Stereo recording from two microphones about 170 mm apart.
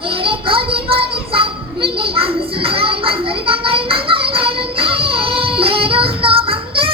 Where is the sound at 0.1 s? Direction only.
30° right (ahead or behind).